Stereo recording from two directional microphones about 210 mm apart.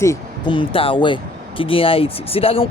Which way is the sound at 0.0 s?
20° left (ahead or behind).